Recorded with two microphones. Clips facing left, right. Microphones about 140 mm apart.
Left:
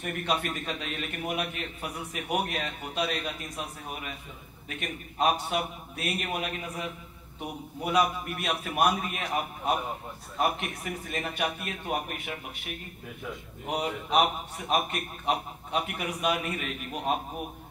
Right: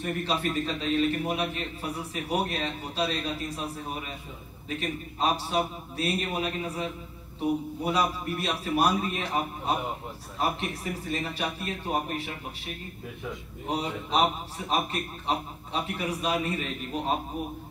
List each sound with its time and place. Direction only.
0.0 s a man's voice: 30° right (ahead or behind)
10.4 s a man's voice: 30° right (ahead or behind)
13.7 s a man's voice: 30° right (ahead or behind)